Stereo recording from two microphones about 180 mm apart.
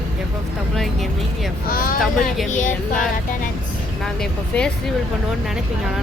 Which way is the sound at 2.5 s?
45° left (ahead or behind).